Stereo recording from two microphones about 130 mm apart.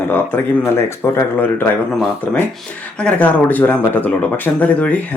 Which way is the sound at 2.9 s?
10° left (ahead or behind).